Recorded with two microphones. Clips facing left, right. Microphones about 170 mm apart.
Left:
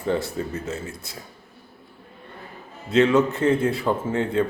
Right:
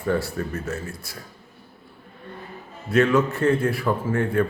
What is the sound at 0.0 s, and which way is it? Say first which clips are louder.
A man's voice: even; 20° left (ahead or behind).